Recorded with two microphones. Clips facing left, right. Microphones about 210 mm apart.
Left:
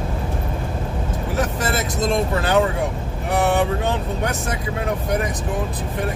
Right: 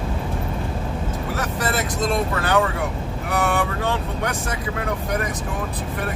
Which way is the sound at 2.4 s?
25° left (ahead or behind).